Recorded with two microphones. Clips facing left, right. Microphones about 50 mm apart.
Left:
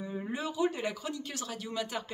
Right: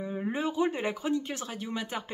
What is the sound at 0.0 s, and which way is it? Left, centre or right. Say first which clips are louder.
Speech: right 5 dB; right.